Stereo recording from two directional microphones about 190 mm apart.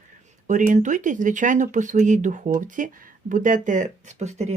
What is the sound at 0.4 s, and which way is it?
Speech, 40° right (ahead or behind).